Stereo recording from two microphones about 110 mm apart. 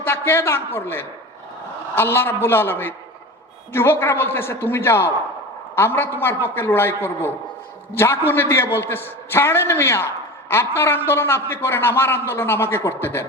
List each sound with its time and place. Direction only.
0.0 s a man's voice: 20° left (ahead or behind)